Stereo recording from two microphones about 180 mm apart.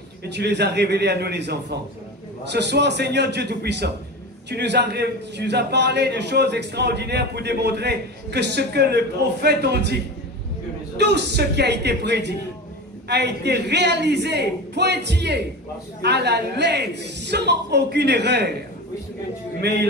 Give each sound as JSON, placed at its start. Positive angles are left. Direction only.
{"t": 0.2, "sound": "a man's voice", "side_deg": -70}
{"t": 11.0, "sound": "a man's voice", "side_deg": -70}